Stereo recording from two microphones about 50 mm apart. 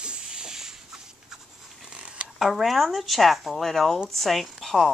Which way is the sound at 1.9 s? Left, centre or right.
Right.